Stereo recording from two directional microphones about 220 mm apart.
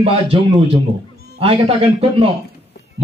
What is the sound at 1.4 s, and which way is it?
Speech, 25° right (ahead or behind).